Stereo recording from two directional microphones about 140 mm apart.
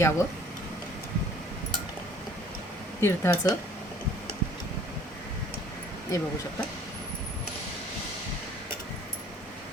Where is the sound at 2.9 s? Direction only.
20° left (ahead or behind).